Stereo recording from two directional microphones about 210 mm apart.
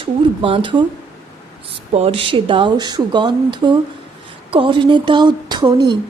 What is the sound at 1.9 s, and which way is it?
Speech, 30° right (ahead or behind).